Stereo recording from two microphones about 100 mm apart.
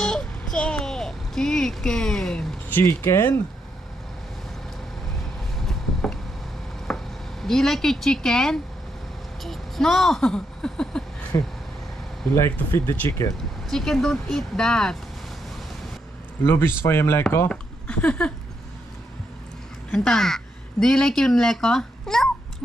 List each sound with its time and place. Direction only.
0.0 s a sound: 5° left (ahead or behind)
2.7 s speech: 25° left (ahead or behind)
6.9 s a sound: 5° left (ahead or behind)
7.4 s speech: 5° left (ahead or behind)
11.3 s speech: 35° left (ahead or behind)
12.4 s speech: 25° left (ahead or behind)
13.7 s speech: 5° left (ahead or behind)
16.4 s speech: 25° left (ahead or behind)
17.5 s speech: 10° left (ahead or behind)
19.9 s speech: 5° left (ahead or behind)